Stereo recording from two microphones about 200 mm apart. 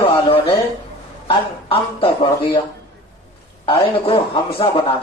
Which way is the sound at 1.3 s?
25° left (ahead or behind).